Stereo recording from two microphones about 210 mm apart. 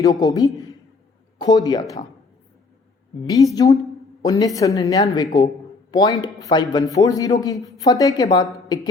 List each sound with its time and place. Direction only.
0.0 s speech: 15° left (ahead or behind)
3.2 s speech: 15° left (ahead or behind)